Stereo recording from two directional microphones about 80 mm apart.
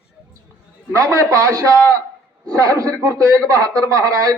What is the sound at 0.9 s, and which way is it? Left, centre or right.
A man's voice, right.